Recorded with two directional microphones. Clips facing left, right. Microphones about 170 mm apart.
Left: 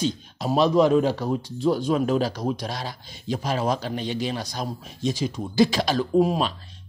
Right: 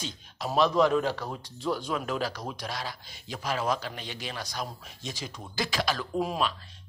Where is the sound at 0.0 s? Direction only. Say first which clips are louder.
Left 10 dB; 25° left (ahead or behind).